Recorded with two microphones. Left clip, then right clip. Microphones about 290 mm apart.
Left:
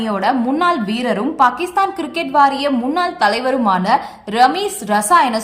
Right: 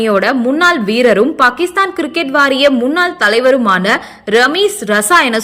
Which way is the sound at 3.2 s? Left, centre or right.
Left.